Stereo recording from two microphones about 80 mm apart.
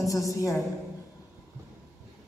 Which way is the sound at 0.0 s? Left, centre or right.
Left.